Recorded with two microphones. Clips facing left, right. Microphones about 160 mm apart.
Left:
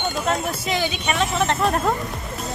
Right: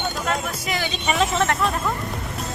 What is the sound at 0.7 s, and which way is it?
Speech, 20° left (ahead or behind).